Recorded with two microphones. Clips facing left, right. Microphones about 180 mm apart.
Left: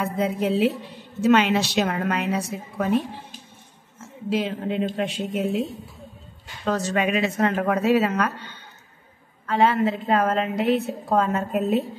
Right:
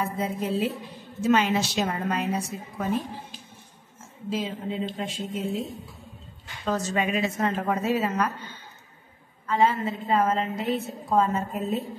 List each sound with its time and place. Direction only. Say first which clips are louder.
0.0 s a woman's voice: left 5 dB; 75° left (ahead or behind)
4.3 s a woman's voice: left 5 dB; 70° left (ahead or behind)
6.6 s a woman's voice: left 3 dB; 70° left (ahead or behind)
9.5 s a woman's voice: left 3 dB; 75° left (ahead or behind)